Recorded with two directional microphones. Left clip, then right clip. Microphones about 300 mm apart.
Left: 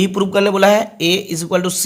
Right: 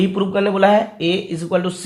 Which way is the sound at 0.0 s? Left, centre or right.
Left.